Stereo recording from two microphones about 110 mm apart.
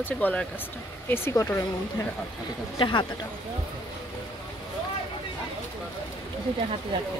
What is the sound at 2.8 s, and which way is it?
Speech, 45° left (ahead or behind).